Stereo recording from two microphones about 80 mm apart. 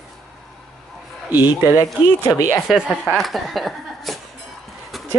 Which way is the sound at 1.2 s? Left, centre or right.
Right.